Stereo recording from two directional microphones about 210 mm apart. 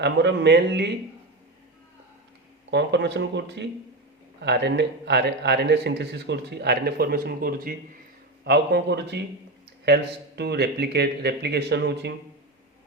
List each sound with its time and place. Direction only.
0.0 s a man's voice: 55° right (ahead or behind)
2.6 s a man's voice: 55° right (ahead or behind)